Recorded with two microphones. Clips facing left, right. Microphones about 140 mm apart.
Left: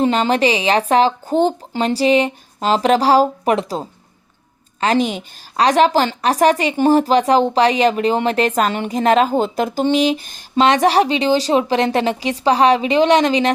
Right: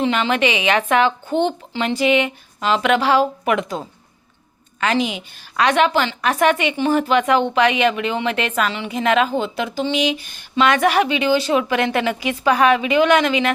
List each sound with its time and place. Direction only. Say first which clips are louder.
0.0 s a woman's voice: left 3 dB; 40° left (ahead or behind)